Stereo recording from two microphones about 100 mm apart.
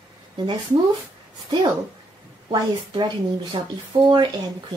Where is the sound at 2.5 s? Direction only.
50° right (ahead or behind).